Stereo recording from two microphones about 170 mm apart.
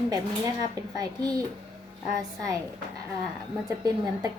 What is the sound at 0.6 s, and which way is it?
A woman's voice, 20° right (ahead or behind).